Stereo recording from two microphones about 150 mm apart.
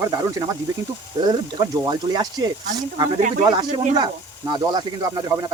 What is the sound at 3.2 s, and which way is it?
Speech, 55° right (ahead or behind).